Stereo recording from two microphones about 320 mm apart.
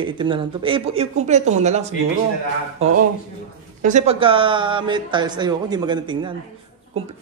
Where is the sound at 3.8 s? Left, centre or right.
Right.